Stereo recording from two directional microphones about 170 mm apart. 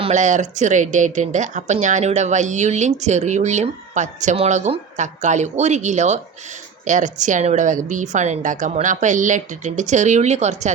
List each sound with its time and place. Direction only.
0.0 s speech: 45° right (ahead or behind)